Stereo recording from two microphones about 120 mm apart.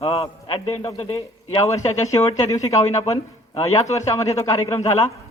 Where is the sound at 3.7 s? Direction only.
25° left (ahead or behind).